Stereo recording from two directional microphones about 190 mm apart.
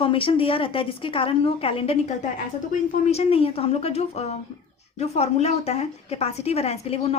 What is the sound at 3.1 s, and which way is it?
A woman's voice, 30° left (ahead or behind).